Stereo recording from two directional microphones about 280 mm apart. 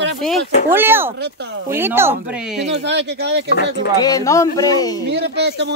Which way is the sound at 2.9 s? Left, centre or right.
Right.